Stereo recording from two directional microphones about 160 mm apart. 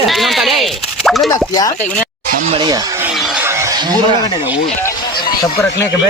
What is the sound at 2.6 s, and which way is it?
Speech, 25° right (ahead or behind).